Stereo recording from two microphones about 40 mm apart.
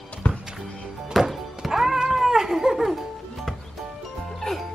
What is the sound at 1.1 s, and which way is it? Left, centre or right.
Music, centre.